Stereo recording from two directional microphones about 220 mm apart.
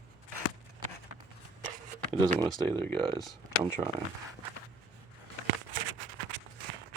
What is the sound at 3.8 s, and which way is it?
Speech, 15° right (ahead or behind).